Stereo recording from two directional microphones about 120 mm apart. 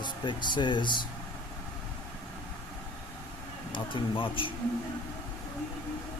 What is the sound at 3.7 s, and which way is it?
Speech, 45° left (ahead or behind).